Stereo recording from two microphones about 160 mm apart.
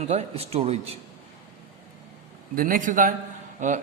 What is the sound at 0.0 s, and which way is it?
Speech, 45° right (ahead or behind).